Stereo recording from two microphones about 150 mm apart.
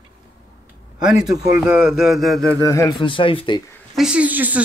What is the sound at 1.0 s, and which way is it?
A man's voice, 5° right (ahead or behind).